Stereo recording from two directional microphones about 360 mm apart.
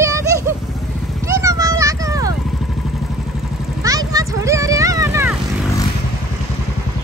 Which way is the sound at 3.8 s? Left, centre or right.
Centre.